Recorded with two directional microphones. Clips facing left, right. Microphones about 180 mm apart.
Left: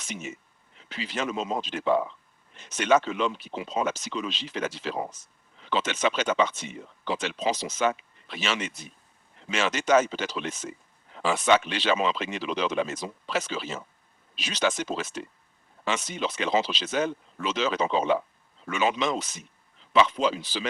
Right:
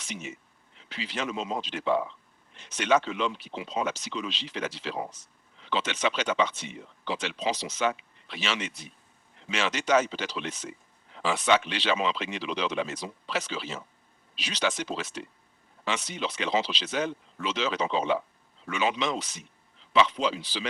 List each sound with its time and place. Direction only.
0.0 s speech: 45° left (ahead or behind)